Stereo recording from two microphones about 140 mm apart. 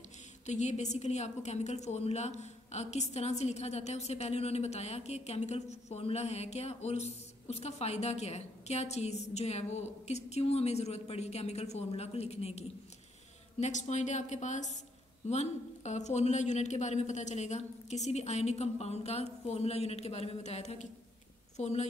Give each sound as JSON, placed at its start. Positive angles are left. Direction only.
{"t": 0.5, "sound": "a woman's voice", "side_deg": 55}